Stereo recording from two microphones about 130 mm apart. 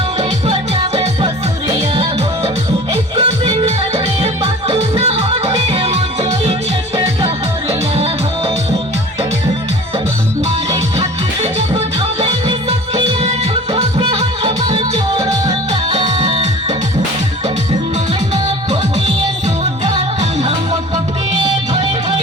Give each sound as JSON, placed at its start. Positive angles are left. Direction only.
{"t": 0.2, "sound": "music", "side_deg": -50}
{"t": 2.9, "sound": "music", "side_deg": -45}
{"t": 7.7, "sound": "music", "side_deg": -50}
{"t": 13.2, "sound": "music", "side_deg": -60}
{"t": 14.0, "sound": "music", "side_deg": -45}